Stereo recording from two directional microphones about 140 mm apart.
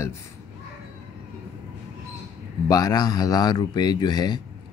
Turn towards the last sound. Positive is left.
turn(degrees=30)  # may be behind; listen again after turning